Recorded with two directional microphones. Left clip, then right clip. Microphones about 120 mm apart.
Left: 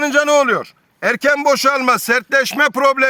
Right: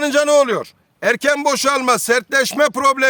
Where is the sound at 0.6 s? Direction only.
30° right (ahead or behind).